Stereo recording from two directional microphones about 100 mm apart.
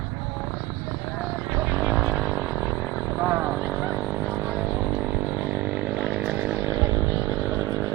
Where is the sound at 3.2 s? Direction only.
15° right (ahead or behind).